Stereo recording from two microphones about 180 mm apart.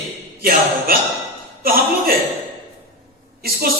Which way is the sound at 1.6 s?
55° right (ahead or behind).